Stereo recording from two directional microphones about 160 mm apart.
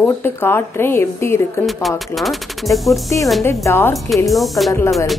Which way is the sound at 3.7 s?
15° left (ahead or behind).